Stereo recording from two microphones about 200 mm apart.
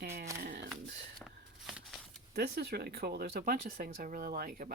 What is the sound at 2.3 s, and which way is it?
Speech, 55° right (ahead or behind).